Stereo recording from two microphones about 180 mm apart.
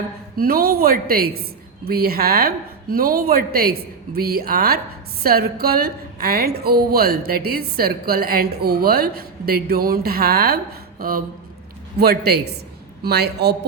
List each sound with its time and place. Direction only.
0.3 s a woman's voice: 55° right (ahead or behind)
11.9 s a woman's voice: 60° right (ahead or behind)